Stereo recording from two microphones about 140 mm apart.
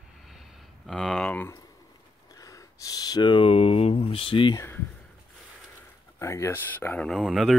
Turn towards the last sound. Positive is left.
turn(degrees=0)  # may be behind; listen again after turning